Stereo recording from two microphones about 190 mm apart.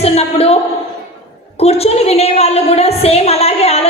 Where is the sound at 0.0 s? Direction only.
30° left (ahead or behind).